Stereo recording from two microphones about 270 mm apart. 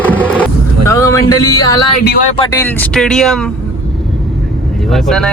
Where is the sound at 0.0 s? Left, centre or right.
Centre.